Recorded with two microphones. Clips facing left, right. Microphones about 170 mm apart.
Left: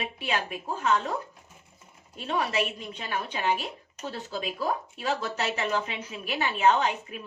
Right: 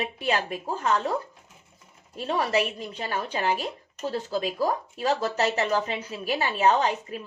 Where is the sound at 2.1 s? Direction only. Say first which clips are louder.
Right 3 dB; 40° right (ahead or behind).